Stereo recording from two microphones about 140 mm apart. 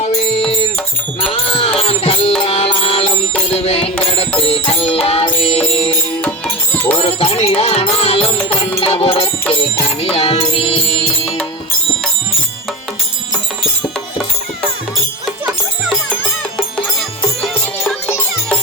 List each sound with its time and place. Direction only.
1.2 s music: 40° left (ahead or behind)
6.2 s music: 10° left (ahead or behind)
7.0 s music: 45° left (ahead or behind)
15.4 s music: centre (ahead or behind)
18.0 s music: 10° left (ahead or behind)